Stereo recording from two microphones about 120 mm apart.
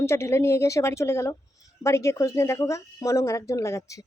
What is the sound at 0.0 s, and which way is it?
A woman's voice, 20° left (ahead or behind).